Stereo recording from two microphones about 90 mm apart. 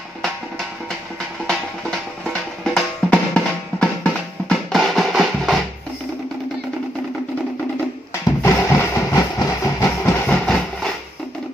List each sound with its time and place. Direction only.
1.5 s drum: 5° left (ahead or behind)
4.7 s music: centre (ahead or behind)
8.4 s drum: 30° left (ahead or behind)
9.1 s train: 45° left (ahead or behind)
10.2 s train: 10° left (ahead or behind)